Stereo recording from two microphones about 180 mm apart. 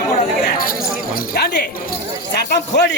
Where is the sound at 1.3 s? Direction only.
65° left (ahead or behind).